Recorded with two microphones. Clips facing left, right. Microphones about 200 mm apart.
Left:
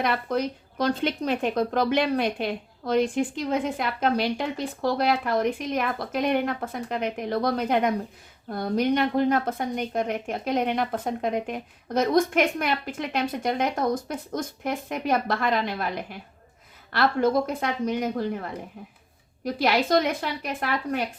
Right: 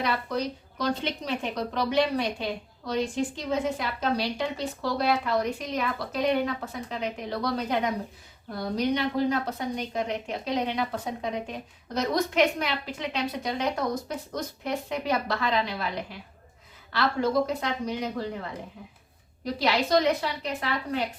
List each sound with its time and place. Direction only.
0.0 s speech: 55° left (ahead or behind)